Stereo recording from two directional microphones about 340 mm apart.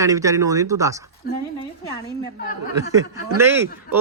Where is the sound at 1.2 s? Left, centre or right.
Left.